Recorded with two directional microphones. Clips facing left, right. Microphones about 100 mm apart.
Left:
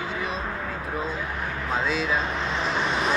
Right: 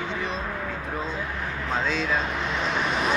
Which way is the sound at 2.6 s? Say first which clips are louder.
Even; centre (ahead or behind).